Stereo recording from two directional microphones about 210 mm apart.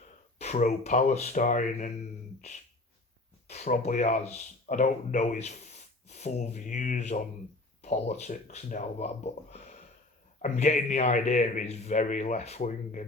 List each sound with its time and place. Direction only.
0.0 s speech: 30° left (ahead or behind)
3.4 s a man's voice: 30° left (ahead or behind)